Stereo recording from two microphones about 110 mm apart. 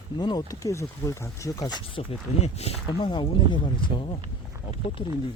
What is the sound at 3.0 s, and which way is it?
Speech, 45° left (ahead or behind).